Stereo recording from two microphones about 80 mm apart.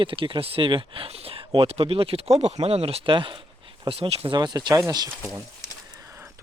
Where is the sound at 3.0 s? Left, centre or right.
Right.